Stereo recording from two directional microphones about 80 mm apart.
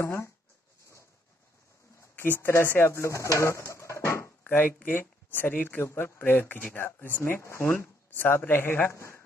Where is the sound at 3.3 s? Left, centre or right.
Left.